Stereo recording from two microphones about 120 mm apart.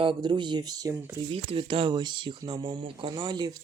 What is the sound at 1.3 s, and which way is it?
Speech, 45° right (ahead or behind).